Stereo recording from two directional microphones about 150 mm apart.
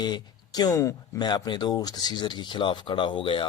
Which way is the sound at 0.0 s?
30° left (ahead or behind).